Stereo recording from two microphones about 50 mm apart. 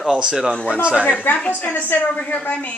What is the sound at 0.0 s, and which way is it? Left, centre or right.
Speech, centre.